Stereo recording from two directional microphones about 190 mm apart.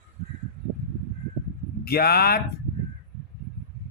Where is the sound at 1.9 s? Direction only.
55° left (ahead or behind).